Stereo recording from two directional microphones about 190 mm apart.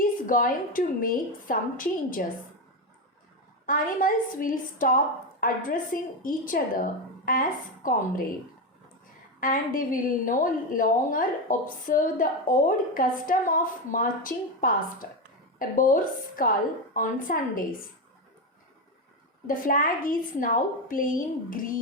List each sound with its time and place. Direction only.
0.0 s a woman's voice: 45° left (ahead or behind)
3.7 s a woman's voice: 45° left (ahead or behind)
9.4 s a woman's voice: 45° left (ahead or behind)
19.5 s a woman's voice: 45° left (ahead or behind)